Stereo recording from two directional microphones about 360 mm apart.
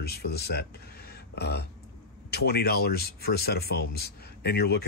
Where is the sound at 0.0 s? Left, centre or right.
Left.